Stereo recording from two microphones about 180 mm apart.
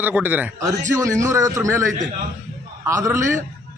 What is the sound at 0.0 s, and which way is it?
A man's voice, 10° right (ahead or behind).